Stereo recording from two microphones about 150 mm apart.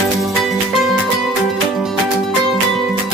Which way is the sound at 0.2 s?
Centre (ahead or behind).